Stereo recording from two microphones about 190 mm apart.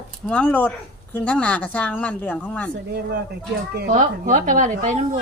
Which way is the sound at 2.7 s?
60° right (ahead or behind).